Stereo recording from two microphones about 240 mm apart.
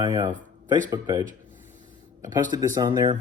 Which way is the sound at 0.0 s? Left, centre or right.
Centre.